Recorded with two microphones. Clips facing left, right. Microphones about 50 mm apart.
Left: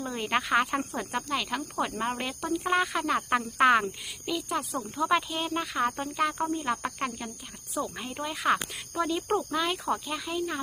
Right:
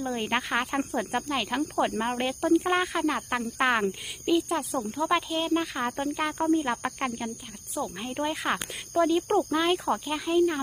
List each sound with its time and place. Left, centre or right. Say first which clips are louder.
0.0 s speech: right 1 dB; centre
6.5 s speech: right 4 dB; centre
8.1 s speech: left 2 dB; centre